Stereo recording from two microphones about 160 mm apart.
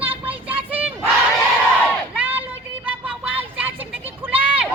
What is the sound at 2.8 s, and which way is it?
Music, 10° right (ahead or behind).